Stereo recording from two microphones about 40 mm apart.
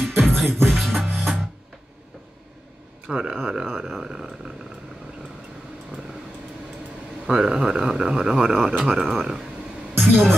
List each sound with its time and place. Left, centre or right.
0.2 s music: centre
1.1 s music: centre
3.1 s speech: centre
7.2 s speech: centre
10.0 s speech: centre